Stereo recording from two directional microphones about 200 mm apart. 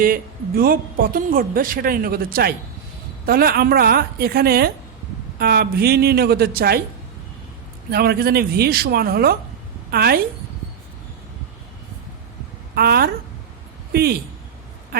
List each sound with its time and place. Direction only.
0.0 s speech: 45° right (ahead or behind)
7.9 s speech: 50° right (ahead or behind)
12.7 s speech: 50° right (ahead or behind)